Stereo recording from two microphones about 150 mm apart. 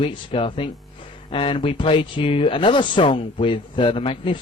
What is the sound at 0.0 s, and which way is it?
Speech, 35° left (ahead or behind).